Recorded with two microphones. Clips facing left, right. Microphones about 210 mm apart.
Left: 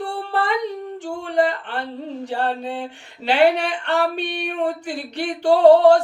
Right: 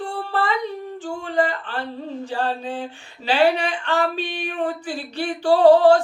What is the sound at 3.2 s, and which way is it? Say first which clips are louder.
Speech: left 2 dB; 65° left (ahead or behind).